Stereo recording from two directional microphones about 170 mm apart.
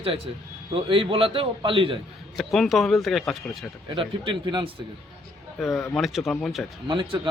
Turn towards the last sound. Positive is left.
turn(degrees=-30)  # may be behind; listen again after turning